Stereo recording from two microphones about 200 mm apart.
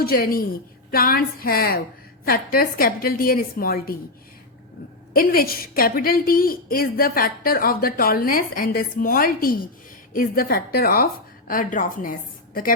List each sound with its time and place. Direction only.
0.0 s a woman's voice: 45° left (ahead or behind)
5.1 s a woman's voice: 45° left (ahead or behind)